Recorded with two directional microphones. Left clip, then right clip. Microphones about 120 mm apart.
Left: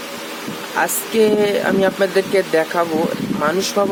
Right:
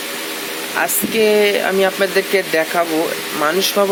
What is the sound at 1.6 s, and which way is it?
Speech, 15° left (ahead or behind).